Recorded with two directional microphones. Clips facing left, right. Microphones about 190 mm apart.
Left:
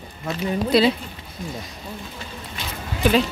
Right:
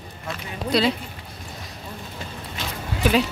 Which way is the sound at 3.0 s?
5° right (ahead or behind).